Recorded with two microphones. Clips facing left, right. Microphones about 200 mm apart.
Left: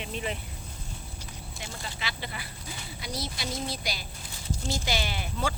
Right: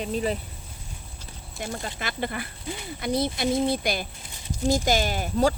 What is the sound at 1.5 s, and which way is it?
Speech, 50° right (ahead or behind).